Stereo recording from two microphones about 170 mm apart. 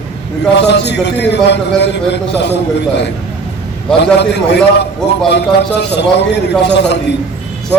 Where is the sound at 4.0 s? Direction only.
85° left.